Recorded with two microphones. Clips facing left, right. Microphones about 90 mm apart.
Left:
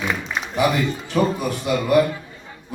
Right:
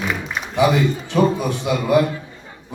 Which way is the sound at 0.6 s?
20° right (ahead or behind).